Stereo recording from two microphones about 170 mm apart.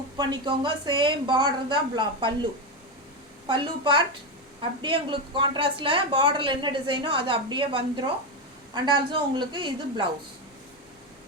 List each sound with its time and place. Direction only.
0.2 s a woman's voice: 30° right (ahead or behind)
3.4 s a woman's voice: 30° right (ahead or behind)